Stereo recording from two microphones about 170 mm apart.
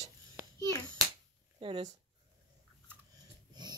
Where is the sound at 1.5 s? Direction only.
30° right (ahead or behind).